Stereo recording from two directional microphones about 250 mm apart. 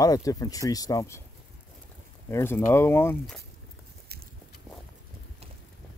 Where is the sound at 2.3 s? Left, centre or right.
Centre.